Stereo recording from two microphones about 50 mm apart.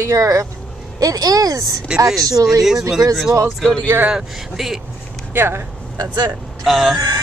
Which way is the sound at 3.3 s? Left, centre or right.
Right.